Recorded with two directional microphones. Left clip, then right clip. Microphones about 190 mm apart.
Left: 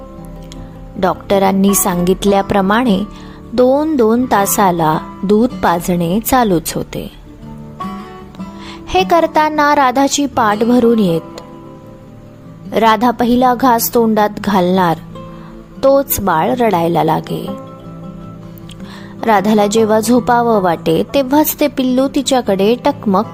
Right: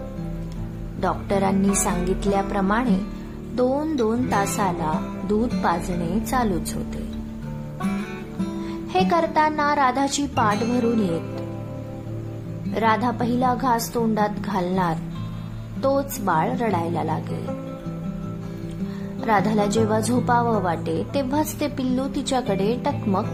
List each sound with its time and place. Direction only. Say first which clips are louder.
0.9 s a woman's voice: left 10 dB; 40° left (ahead or behind)
8.9 s a woman's voice: left 9 dB; 40° left (ahead or behind)
12.7 s a woman's voice: left 10 dB; 40° left (ahead or behind)
19.2 s a woman's voice: left 9 dB; 40° left (ahead or behind)